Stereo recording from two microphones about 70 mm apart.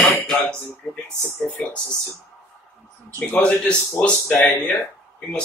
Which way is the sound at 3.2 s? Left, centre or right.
Left.